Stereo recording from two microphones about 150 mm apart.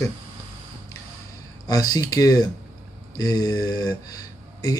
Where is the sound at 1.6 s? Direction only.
25° left (ahead or behind).